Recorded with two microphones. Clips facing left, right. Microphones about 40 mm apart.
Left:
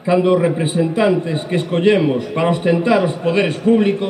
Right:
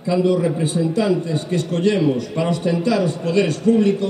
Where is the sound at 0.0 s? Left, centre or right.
Left.